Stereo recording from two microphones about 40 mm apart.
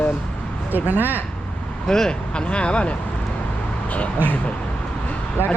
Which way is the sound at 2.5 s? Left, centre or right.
Left.